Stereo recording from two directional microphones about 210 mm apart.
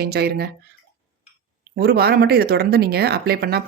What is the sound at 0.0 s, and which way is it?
Speech, 50° right (ahead or behind).